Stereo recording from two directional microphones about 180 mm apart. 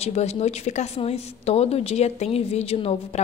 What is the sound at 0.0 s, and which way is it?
A woman's voice, 35° left (ahead or behind).